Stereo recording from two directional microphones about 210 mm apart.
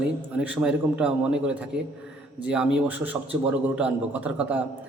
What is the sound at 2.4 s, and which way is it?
A man's voice, 5° right (ahead or behind).